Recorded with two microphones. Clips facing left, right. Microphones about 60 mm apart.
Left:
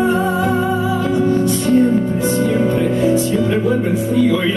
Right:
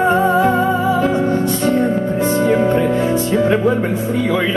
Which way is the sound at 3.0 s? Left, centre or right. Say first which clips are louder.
Even; right.